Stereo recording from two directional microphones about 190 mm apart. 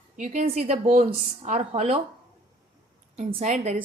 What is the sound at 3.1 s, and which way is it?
Speech, 35° right (ahead or behind).